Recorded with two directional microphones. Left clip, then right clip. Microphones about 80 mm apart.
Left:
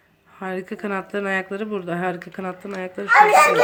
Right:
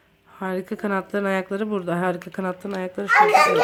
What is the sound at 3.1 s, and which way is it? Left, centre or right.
Speech, left.